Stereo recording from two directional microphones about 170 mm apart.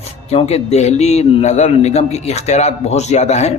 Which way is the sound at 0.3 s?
40° left (ahead or behind).